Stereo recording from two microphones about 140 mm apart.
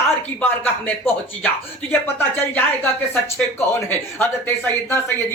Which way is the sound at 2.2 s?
15° left (ahead or behind).